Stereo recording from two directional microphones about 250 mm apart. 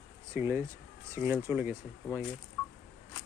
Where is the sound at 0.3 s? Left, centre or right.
Centre.